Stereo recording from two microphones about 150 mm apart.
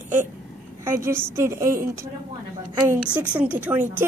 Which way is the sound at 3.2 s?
10° right (ahead or behind).